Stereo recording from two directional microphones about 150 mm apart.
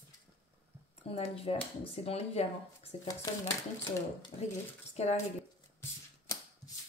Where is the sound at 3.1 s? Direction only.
20° left (ahead or behind).